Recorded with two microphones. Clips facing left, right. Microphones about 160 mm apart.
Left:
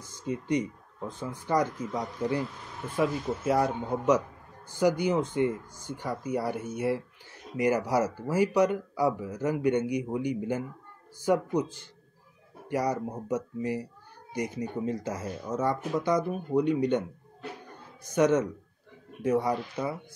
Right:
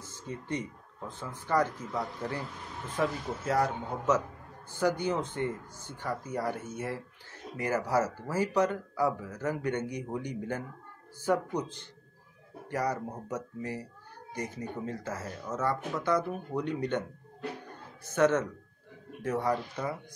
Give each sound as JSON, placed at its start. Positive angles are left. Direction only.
{"t": 0.0, "sound": "speech", "side_deg": 15}
{"t": 18.0, "sound": "speech", "side_deg": 15}